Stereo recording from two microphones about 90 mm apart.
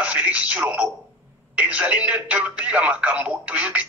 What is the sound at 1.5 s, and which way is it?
Speech, 15° right (ahead or behind).